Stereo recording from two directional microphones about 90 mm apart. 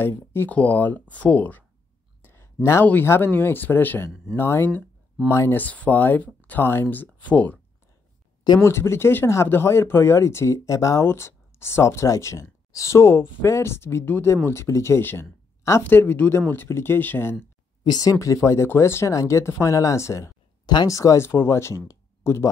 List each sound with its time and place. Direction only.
0.0 s speech: 25° left (ahead or behind)
2.2 s a sound: 30° left (ahead or behind)
2.9 s speech: 25° left (ahead or behind)
5.6 s speech: 20° left (ahead or behind)
8.5 s speech: 30° left (ahead or behind)
17.8 s speech: 45° left (ahead or behind)
18.2 s speech: 35° left (ahead or behind)
20.6 s speech: 45° left (ahead or behind); by 22.5 s 30° left (ahead or behind)